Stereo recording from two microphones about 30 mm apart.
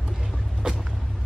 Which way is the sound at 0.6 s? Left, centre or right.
Right.